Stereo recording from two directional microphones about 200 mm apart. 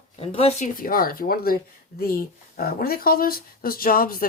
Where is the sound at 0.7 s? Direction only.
45° left (ahead or behind).